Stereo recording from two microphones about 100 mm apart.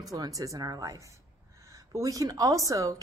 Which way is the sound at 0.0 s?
35° right (ahead or behind).